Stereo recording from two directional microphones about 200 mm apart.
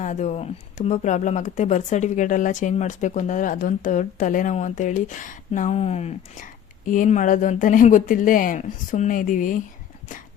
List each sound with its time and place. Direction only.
0.0 s speech: 35° left (ahead or behind)